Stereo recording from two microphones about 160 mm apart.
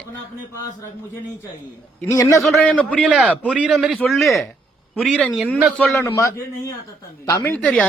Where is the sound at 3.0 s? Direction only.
5° right (ahead or behind).